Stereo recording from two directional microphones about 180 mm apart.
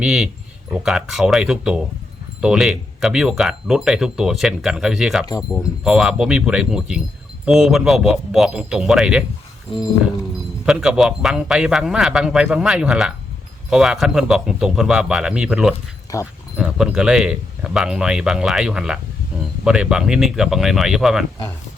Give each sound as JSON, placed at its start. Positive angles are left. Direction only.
{"t": 0.0, "sound": "speech", "side_deg": -5}
{"t": 10.7, "sound": "speech", "side_deg": -5}
{"t": 16.1, "sound": "speech", "side_deg": 20}
{"t": 16.6, "sound": "speech", "side_deg": -5}